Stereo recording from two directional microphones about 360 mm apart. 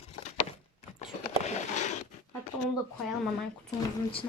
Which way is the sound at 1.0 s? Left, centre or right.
Centre.